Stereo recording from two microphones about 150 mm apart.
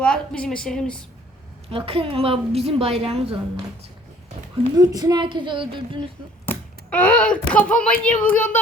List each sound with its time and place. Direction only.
0.0 s a woman's voice: 5° left (ahead or behind)
1.7 s a woman's voice: 40° right (ahead or behind)
4.8 s a woman's voice: 25° right (ahead or behind)
6.4 s speech: 10° left (ahead or behind)